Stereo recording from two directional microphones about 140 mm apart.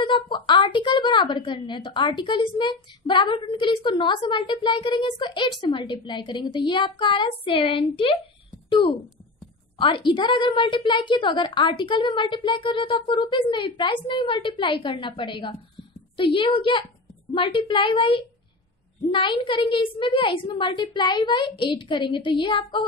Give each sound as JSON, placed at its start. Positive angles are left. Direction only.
{"t": 0.0, "sound": "a woman's voice", "side_deg": 35}
{"t": 9.8, "sound": "a woman's voice", "side_deg": 35}